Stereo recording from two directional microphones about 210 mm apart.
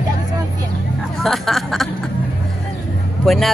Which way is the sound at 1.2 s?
Centre (ahead or behind).